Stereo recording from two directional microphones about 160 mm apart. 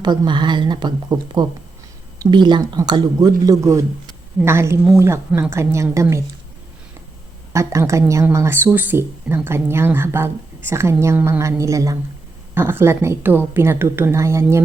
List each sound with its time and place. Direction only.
0.0 s a woman's voice: 30° right (ahead or behind)
7.5 s a woman's voice: 20° right (ahead or behind)